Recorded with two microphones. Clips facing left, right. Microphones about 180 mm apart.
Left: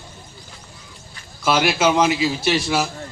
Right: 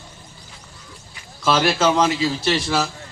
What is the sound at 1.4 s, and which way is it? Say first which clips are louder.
A man's voice: even; 10° left (ahead or behind).